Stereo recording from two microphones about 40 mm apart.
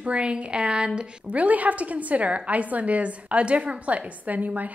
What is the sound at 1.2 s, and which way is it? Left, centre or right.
A woman's voice, right.